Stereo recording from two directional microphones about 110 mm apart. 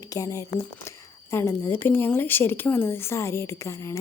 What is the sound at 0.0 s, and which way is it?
Speech, 30° left (ahead or behind).